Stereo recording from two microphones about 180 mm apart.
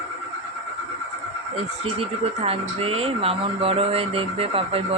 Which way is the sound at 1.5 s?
35° right (ahead or behind).